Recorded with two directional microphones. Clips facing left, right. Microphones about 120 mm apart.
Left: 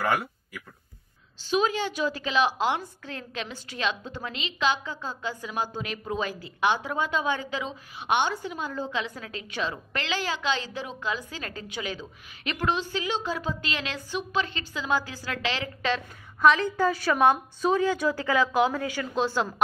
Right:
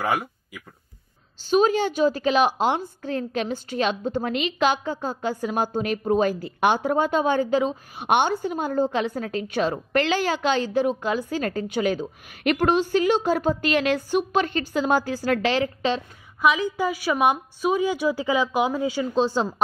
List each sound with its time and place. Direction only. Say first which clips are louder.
0.0 s speech: right 2 dB; 15° right (ahead or behind)
1.5 s a woman's voice: right 6 dB; 45° right (ahead or behind)
16.3 s a woman's voice: even; 5° right (ahead or behind)